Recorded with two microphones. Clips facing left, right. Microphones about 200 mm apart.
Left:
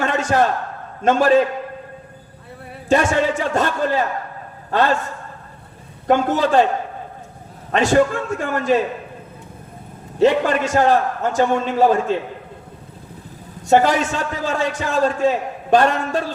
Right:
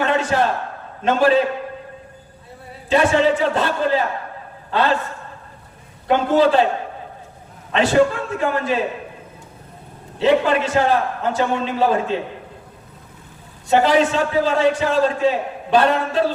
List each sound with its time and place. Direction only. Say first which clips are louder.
0.0 s a sound: even; 45° left (ahead or behind)
1.0 s a man's voice: left 1 dB; 45° left (ahead or behind)
2.9 s a man's voice: right 1 dB; 45° left (ahead or behind)
6.1 s a man's voice: right 1 dB; 45° left (ahead or behind)
7.7 s a man's voice: even; 45° left (ahead or behind)
10.2 s a man's voice: left 1 dB; 45° left (ahead or behind)
13.7 s a man's voice: even; 45° left (ahead or behind)